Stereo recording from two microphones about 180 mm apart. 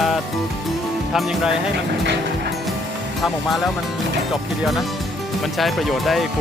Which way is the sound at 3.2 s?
Centre (ahead or behind).